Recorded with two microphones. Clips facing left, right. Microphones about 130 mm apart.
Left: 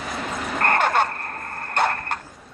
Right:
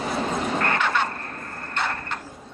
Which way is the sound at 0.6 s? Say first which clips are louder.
Left 8 dB; 50° left (ahead or behind).